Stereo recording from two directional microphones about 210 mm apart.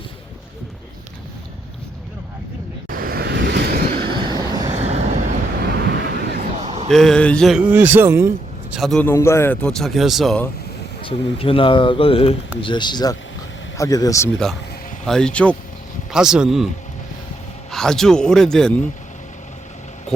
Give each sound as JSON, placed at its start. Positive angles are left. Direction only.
{"t": 2.9, "sound": "vehicle", "side_deg": -45}
{"t": 4.4, "sound": "vehicle", "side_deg": -20}
{"t": 4.7, "sound": "vehicle", "side_deg": -30}
{"t": 5.6, "sound": "vehicle", "side_deg": -55}
{"t": 6.7, "sound": "a sound", "side_deg": -30}
{"t": 6.9, "sound": "speech", "side_deg": 0}
{"t": 8.7, "sound": "speech", "side_deg": 0}
{"t": 11.0, "sound": "speech", "side_deg": 25}
{"t": 15.0, "sound": "speech", "side_deg": 5}
{"t": 17.7, "sound": "speech", "side_deg": 0}